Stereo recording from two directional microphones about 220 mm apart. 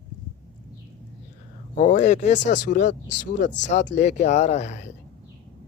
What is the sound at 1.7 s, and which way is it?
Speech, 35° left (ahead or behind).